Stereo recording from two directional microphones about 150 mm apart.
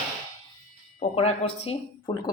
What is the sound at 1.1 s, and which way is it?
A woman's voice, 40° left (ahead or behind).